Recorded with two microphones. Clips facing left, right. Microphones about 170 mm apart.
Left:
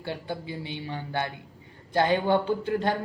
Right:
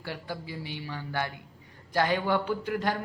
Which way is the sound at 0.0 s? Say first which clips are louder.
Left 4 dB; 25° left (ahead or behind).